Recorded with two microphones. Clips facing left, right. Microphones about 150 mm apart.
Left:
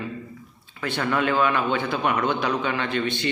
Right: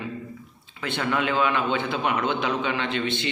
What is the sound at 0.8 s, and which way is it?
Speech, 20° right (ahead or behind).